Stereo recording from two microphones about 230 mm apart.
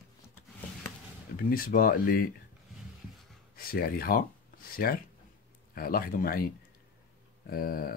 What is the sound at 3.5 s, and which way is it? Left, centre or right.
Speech, left.